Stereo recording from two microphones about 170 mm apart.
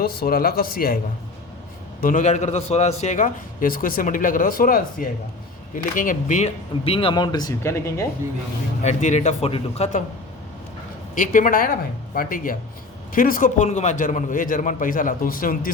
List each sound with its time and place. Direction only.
0.0 s speech: 65° left (ahead or behind)
2.0 s a man's voice: 50° left (ahead or behind); by 8.0 s 15° left (ahead or behind)
8.8 s a man's voice: 45° left (ahead or behind)
11.1 s a man's voice: 50° left (ahead or behind)